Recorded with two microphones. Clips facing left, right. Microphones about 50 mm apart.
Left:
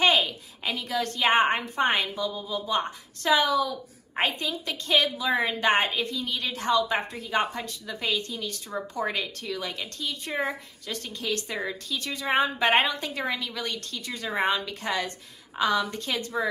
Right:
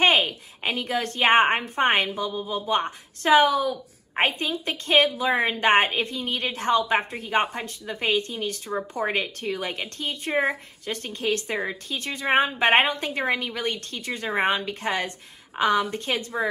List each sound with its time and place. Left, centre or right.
0.0 s a woman's voice: right